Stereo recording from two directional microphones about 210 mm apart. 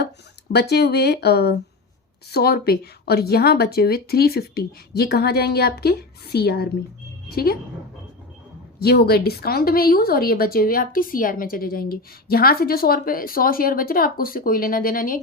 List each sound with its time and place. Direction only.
0.5 s a woman's voice: 50° left (ahead or behind)
8.8 s a woman's voice: 50° left (ahead or behind)